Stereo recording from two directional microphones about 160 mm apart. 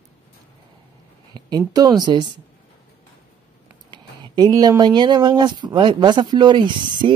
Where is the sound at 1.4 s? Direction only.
25° right (ahead or behind).